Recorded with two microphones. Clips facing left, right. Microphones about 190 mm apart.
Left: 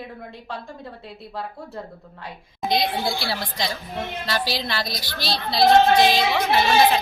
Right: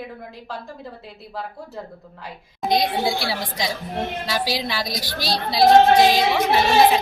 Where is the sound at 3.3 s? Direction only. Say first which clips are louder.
Right 1 dB; 10° right (ahead or behind).